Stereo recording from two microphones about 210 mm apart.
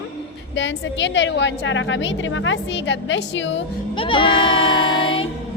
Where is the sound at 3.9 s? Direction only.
25° left (ahead or behind).